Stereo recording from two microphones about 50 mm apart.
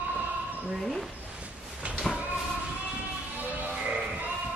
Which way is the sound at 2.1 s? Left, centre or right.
Centre.